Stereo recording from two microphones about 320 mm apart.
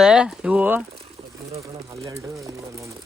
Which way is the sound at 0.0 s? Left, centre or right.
Centre.